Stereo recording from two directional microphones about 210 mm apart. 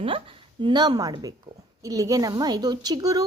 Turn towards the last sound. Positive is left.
turn(degrees=-15)  # may be behind; listen again after turning